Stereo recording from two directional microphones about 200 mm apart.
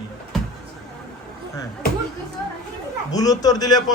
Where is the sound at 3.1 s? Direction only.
20° left (ahead or behind).